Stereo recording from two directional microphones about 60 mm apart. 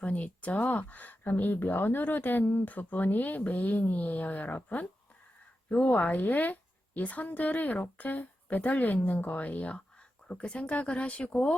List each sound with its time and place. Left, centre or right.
0.0 s speech: left